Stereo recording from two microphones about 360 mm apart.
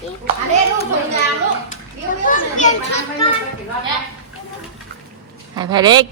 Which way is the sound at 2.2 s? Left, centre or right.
Left.